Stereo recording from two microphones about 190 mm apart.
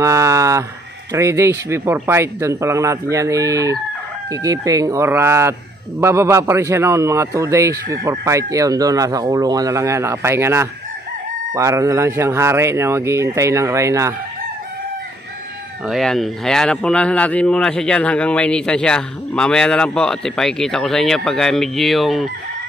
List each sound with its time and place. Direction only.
0.0 s speech: 15° right (ahead or behind)
15.9 s speech: centre (ahead or behind)